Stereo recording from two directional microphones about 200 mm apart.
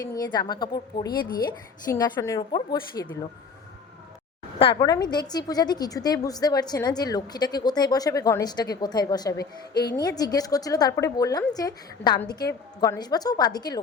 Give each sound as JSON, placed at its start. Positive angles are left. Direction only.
{"t": 0.0, "sound": "a woman's voice", "side_deg": 20}
{"t": 4.8, "sound": "a woman's voice", "side_deg": 20}